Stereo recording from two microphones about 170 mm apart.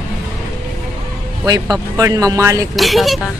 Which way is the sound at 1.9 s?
20° right (ahead or behind).